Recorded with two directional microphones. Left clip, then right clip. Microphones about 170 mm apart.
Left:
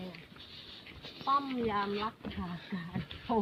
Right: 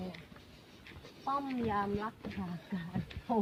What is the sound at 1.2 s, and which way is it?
Speech, 35° right (ahead or behind).